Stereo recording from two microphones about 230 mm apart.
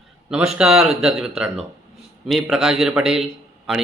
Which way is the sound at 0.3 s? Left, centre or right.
Centre.